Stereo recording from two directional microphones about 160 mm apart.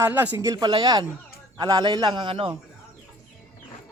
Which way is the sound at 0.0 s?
10° right (ahead or behind).